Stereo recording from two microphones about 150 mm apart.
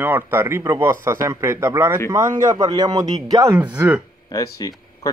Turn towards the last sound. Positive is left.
turn(degrees=25)  # may be behind; listen again after turning